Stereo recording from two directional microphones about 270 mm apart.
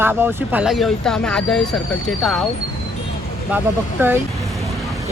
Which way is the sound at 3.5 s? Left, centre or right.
Centre.